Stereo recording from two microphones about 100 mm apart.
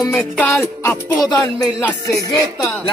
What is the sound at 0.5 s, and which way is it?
Music, 25° left (ahead or behind).